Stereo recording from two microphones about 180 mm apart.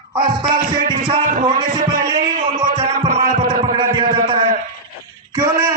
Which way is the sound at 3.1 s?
50° right (ahead or behind).